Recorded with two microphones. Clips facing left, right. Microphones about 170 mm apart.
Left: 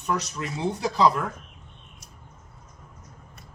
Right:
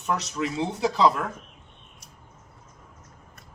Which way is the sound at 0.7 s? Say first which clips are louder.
Even; 20° right (ahead or behind).